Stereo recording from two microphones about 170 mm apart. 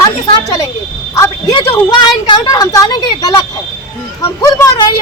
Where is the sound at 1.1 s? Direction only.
15° left (ahead or behind).